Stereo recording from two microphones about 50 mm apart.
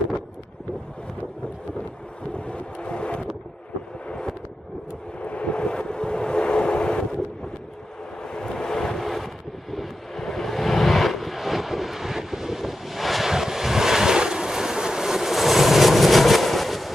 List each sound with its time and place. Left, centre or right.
2.3 s vehicle: left
5.2 s vehicle: left; by 16.9 s centre